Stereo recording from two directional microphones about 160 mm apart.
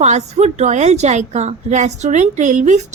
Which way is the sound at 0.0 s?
45° right (ahead or behind).